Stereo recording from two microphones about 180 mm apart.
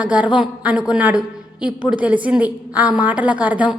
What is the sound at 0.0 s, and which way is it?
A woman's voice, 5° right (ahead or behind).